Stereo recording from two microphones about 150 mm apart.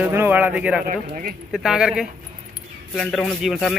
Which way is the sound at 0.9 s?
65° right (ahead or behind).